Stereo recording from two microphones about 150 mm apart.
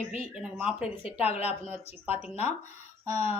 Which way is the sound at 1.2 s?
45° left (ahead or behind).